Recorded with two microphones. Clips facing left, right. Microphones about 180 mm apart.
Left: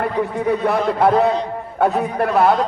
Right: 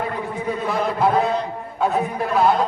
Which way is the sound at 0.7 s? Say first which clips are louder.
Left 1 dB; 65° left (ahead or behind).